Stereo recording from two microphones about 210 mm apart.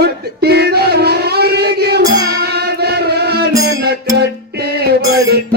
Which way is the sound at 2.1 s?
50° right (ahead or behind).